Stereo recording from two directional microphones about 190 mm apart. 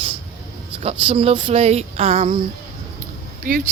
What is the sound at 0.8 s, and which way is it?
Speech, 30° right (ahead or behind).